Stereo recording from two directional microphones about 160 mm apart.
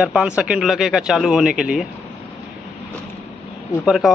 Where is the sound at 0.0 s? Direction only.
5° right (ahead or behind).